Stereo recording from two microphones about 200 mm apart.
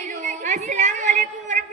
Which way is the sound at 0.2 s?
40° right (ahead or behind).